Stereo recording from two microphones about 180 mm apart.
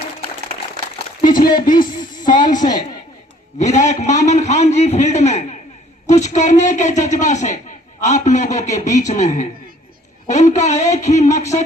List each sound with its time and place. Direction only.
1.2 s speech: 50° left (ahead or behind)
2.6 s a man's voice: 20° left (ahead or behind)
3.6 s a man's voice: 40° left (ahead or behind)